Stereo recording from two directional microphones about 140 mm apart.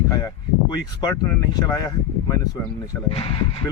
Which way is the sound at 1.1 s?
20° left (ahead or behind).